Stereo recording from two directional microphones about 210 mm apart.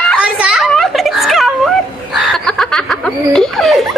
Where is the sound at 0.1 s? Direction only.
5° right (ahead or behind).